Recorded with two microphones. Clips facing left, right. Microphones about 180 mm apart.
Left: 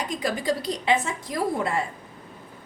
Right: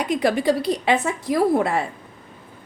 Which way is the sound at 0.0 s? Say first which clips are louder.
Right 7 dB; 65° right (ahead or behind).